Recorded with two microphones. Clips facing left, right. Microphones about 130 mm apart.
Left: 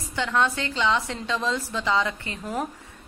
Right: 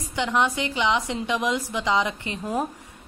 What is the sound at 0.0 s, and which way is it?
Speech, 15° right (ahead or behind).